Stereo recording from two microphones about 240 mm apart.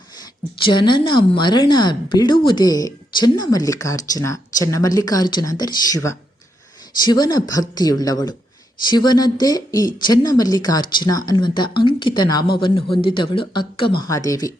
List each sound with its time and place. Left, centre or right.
0.6 s a woman's voice: centre